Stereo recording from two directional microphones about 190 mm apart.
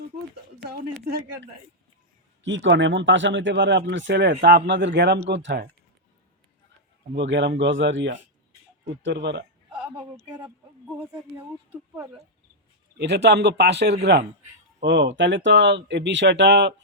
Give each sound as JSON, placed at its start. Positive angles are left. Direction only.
{"t": 0.6, "sound": "a man's voice", "side_deg": -55}
{"t": 2.4, "sound": "a man's voice", "side_deg": -75}
{"t": 7.2, "sound": "speech", "side_deg": -70}
{"t": 9.7, "sound": "speech", "side_deg": -5}
{"t": 13.0, "sound": "a man's voice", "side_deg": -65}
{"t": 14.8, "sound": "speech", "side_deg": -70}